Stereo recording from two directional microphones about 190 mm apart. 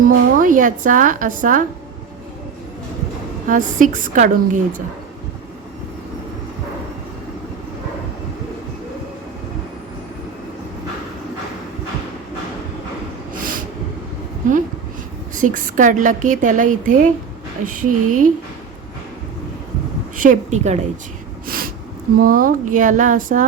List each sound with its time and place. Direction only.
0.0 s a woman's voice: 45° right (ahead or behind)
3.4 s a woman's voice: 45° right (ahead or behind)
15.4 s a woman's voice: 45° right (ahead or behind)
20.1 s a woman's voice: 45° right (ahead or behind)
21.4 s snort: 50° right (ahead or behind)
22.2 s a woman's voice: 45° right (ahead or behind)